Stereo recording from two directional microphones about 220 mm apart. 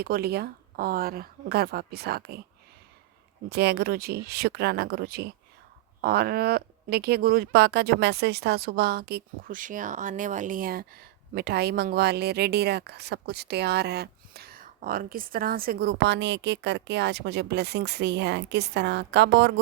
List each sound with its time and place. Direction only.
0.0 s a woman's voice: 45° right (ahead or behind)
3.5 s a woman's voice: 50° right (ahead or behind)